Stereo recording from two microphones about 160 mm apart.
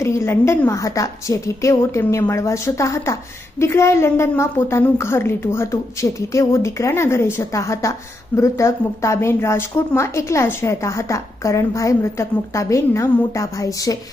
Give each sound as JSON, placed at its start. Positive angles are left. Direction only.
{"t": 0.0, "sound": "a woman's voice", "side_deg": 15}